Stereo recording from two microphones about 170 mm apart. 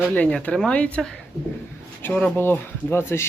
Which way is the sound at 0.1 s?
5° left (ahead or behind).